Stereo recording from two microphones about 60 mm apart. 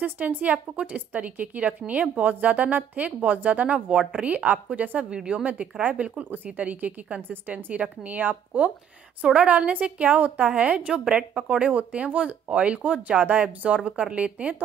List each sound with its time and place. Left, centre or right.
0.0 s a woman's voice: right